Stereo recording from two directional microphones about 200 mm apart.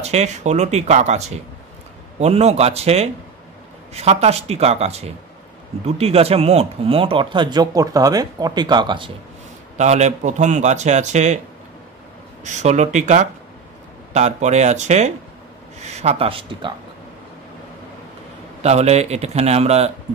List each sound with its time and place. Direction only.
0.0 s a man's voice: 35° right (ahead or behind)
9.8 s a man's voice: 35° right (ahead or behind)
12.4 s a man's voice: 35° right (ahead or behind)
18.6 s a man's voice: 35° right (ahead or behind)